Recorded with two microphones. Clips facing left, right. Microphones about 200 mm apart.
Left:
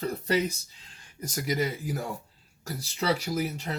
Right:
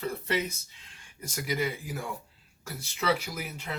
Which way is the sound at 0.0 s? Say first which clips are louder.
Left 4 dB; 35° left (ahead or behind).